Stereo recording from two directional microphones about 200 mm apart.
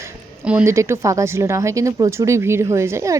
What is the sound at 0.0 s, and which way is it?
A woman's voice, 10° right (ahead or behind).